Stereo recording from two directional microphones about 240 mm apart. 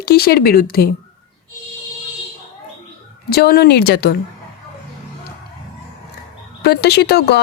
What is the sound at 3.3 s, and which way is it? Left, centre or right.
Speech, left.